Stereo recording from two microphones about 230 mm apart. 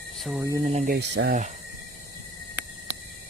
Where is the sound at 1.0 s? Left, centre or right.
Right.